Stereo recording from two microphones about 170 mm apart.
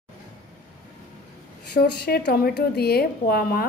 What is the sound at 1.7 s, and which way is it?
A woman's voice, 75° left (ahead or behind).